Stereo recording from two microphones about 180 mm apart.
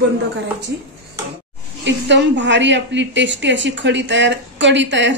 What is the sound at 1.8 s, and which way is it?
A woman's voice, 80° right.